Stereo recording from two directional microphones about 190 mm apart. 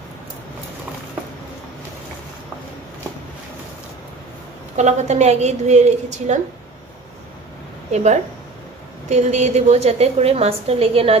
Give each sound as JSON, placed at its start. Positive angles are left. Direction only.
{"t": 4.7, "sound": "a woman's voice", "side_deg": -35}
{"t": 7.9, "sound": "a woman's voice", "side_deg": -35}